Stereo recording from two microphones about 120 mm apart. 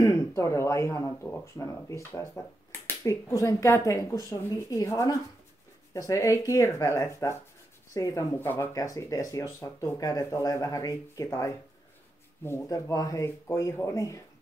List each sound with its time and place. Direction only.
0.0 s speech: 20° left (ahead or behind)
8.4 s speech: 15° left (ahead or behind)
8.7 s speech: 30° left (ahead or behind)